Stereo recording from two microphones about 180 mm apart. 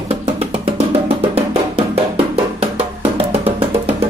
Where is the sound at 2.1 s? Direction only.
35° right (ahead or behind).